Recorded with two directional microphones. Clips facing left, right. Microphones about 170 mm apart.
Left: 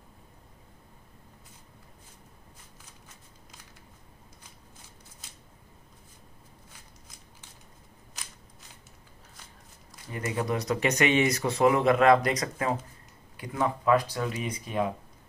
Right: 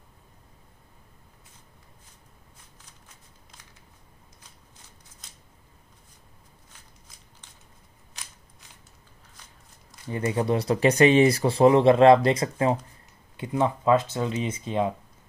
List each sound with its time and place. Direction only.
10.1 s speech: 30° right (ahead or behind)